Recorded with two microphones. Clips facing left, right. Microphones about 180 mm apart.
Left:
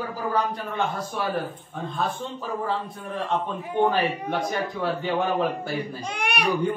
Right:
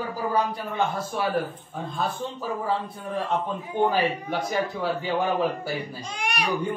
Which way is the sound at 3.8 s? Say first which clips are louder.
Right 1 dB; 10° right (ahead or behind).